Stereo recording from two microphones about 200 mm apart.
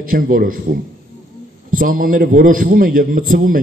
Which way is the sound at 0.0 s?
45° right (ahead or behind).